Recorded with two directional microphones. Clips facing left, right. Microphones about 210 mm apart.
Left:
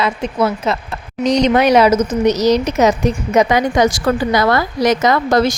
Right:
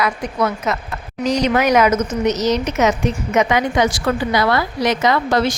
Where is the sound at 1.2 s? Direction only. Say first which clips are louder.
Left 4 dB; 10° right (ahead or behind).